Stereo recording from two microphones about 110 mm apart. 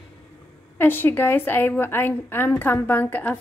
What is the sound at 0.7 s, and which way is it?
A woman's voice, 20° left (ahead or behind).